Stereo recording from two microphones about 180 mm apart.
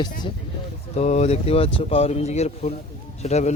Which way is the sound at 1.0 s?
40° left (ahead or behind).